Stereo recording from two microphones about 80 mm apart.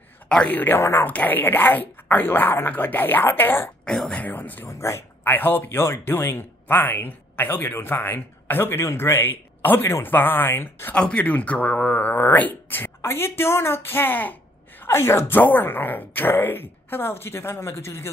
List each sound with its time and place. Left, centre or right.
0.3 s speech: centre
3.8 s speech: centre
4.2 s speech: left
4.6 s speech: left
11.0 s speech: centre; by 18.1 s left